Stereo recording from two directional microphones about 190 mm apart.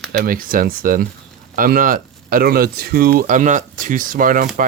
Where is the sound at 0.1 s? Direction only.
50° right (ahead or behind).